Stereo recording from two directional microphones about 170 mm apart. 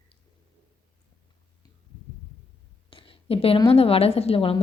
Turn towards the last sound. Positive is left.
turn(degrees=35)  # may be behind; listen again after turning